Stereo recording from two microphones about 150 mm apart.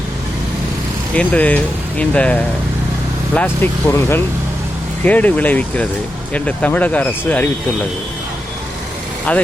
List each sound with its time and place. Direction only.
1.1 s speech: 10° left (ahead or behind)
9.3 s speech: 10° left (ahead or behind)